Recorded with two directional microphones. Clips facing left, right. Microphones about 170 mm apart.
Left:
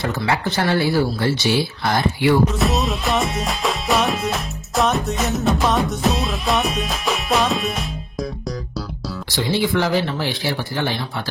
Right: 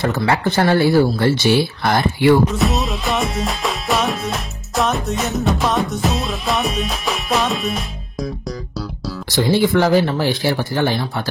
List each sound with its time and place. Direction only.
0.0 s speech: 50° right (ahead or behind)
2.5 s music: centre (ahead or behind)
9.3 s speech: 50° right (ahead or behind)